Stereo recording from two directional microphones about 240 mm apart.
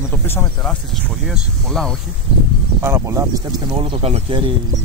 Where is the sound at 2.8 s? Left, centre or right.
Centre.